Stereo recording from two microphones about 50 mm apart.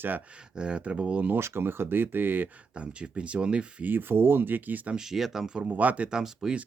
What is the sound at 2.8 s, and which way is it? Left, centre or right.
Speech, right.